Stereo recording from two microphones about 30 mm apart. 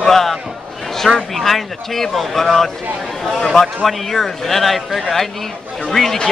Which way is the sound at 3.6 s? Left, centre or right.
Centre.